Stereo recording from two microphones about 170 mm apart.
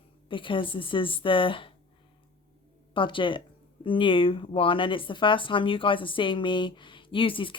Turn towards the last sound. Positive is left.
turn(degrees=30)  # may be behind; listen again after turning